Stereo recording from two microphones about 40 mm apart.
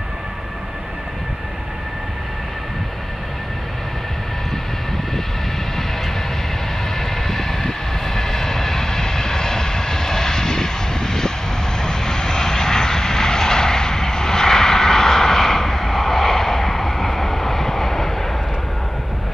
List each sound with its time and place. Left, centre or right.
7.0 s vehicle: centre